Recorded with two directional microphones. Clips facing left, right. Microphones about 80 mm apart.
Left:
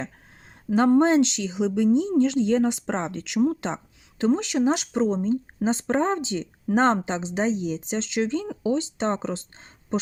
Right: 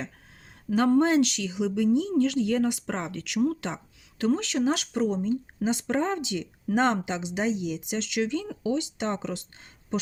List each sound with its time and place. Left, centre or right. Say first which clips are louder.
0.7 s speech: left 3 dB; left